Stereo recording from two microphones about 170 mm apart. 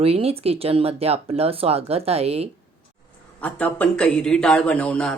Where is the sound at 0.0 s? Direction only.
35° right (ahead or behind).